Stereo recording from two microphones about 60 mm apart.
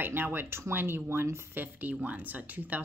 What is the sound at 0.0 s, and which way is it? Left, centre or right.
Speech, right.